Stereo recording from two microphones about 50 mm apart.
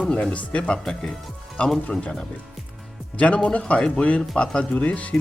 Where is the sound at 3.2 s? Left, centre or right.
Left.